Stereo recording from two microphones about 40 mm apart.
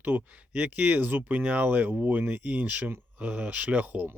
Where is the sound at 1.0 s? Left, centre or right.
Right.